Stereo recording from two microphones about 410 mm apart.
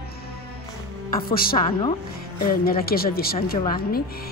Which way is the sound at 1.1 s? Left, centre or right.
Left.